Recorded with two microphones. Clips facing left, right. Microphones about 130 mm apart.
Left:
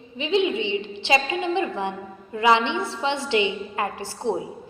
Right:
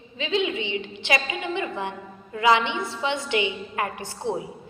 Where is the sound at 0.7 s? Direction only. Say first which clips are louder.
Left 4 dB; 20° left (ahead or behind).